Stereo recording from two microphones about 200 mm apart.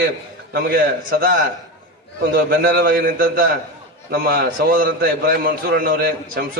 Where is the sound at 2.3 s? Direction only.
45° right (ahead or behind).